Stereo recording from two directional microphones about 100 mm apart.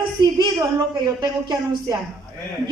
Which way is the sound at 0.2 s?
45° right (ahead or behind).